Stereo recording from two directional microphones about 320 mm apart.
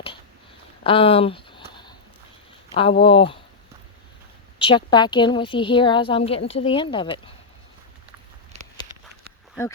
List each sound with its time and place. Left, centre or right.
0.9 s a sound: centre
2.7 s a woman's voice: centre
4.5 s a woman's voice: centre